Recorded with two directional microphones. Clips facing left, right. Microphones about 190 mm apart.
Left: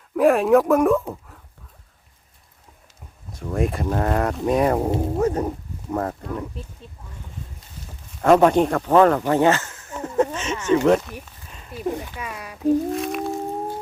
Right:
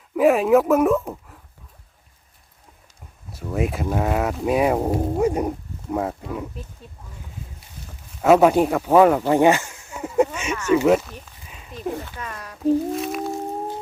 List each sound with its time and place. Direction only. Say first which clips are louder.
0.2 s speech: even; centre (ahead or behind)
3.3 s speech: even; 5° right (ahead or behind)
8.2 s speech: even; 5° right (ahead or behind)
11.4 s a sound: even; 5° right (ahead or behind)
11.7 s speech: left 2 dB; 10° left (ahead or behind)
12.9 s speech: left 1 dB; centre (ahead or behind)